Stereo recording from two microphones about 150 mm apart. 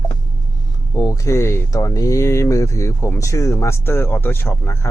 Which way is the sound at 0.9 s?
20° left (ahead or behind).